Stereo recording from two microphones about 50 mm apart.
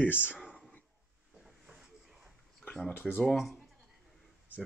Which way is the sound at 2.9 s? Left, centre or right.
Left.